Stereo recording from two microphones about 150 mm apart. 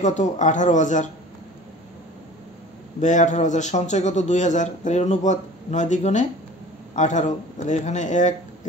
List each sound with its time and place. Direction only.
0.0 s speech: 55° left (ahead or behind)
3.0 s a man's voice: 55° left (ahead or behind)